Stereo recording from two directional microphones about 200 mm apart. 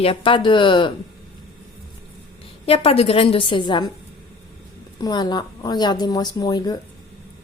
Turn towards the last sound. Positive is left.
turn(degrees=20)  # may be behind; listen again after turning